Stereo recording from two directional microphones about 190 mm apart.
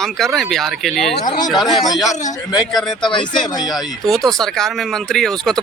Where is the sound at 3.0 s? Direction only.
25° left (ahead or behind).